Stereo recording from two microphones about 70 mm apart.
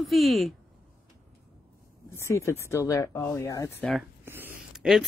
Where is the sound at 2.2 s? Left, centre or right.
Left.